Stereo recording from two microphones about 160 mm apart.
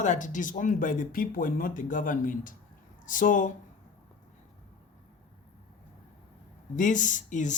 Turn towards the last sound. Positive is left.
turn(degrees=50)  # may be behind; listen again after turning